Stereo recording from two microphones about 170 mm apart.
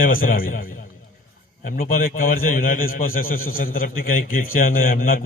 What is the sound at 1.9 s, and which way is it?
A man's voice, 60° left (ahead or behind).